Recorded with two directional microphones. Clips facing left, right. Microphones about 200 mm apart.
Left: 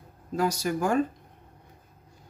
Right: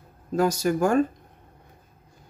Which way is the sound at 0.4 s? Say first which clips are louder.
Right 5 dB; 50° right (ahead or behind).